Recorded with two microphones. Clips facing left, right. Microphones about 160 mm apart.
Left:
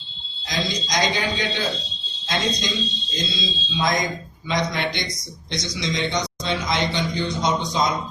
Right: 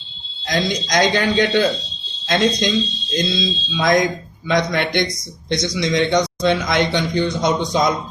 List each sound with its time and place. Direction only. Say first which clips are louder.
0.4 s a man's voice: right 6 dB; 55° right (ahead or behind)